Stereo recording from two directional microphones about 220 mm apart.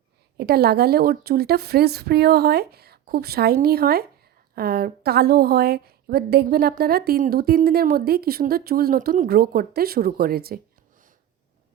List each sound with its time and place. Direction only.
0.3 s a woman's voice: 45° right (ahead or behind)